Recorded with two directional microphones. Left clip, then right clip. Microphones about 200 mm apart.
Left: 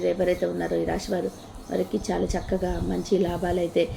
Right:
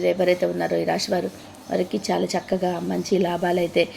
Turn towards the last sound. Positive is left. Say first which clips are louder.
# right 3 dB
turn(degrees=-15)  # may be behind; listen again after turning